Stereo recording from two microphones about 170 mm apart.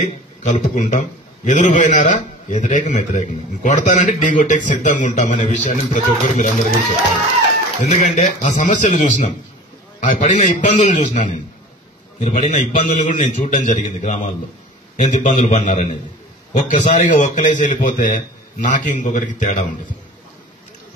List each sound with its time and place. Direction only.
0.4 s a man's voice: 45° left (ahead or behind)
7.8 s a man's voice: 40° left (ahead or behind)